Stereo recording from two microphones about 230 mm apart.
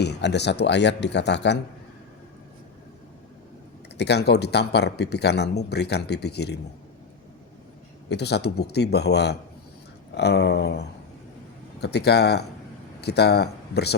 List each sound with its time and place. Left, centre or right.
0.0 s speech: left
3.9 s speech: left
8.1 s speech: left